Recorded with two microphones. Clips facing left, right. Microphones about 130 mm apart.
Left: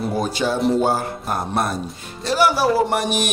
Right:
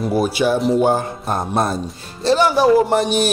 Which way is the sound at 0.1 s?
10° right (ahead or behind).